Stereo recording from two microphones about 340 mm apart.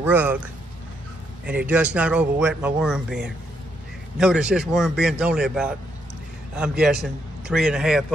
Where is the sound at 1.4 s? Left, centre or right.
Centre.